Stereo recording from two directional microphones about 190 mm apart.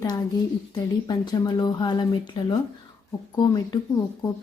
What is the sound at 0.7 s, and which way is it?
A woman's voice, 20° left (ahead or behind).